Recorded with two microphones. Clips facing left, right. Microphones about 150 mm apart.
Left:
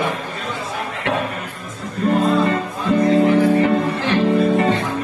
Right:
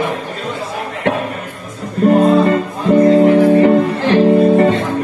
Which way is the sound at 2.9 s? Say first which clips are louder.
Right 6 dB; 45° right (ahead or behind).